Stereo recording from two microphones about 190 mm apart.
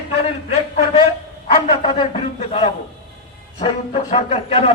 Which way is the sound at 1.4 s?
35° left (ahead or behind).